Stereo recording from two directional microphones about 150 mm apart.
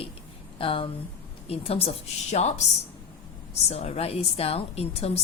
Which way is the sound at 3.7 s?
40° left (ahead or behind).